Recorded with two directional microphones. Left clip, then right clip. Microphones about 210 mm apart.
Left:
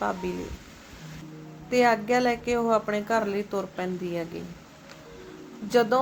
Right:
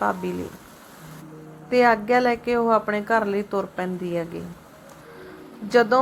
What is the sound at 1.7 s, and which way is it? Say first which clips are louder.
A woman's voice: right 4 dB; 20° right (ahead or behind).